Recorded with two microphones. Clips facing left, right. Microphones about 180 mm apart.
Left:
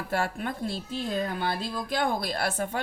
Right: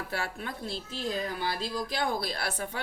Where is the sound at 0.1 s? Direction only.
50° left (ahead or behind).